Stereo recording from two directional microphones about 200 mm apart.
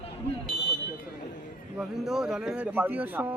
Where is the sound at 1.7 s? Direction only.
Centre (ahead or behind).